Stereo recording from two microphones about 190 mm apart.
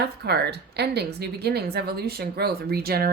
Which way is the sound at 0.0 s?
60° right (ahead or behind).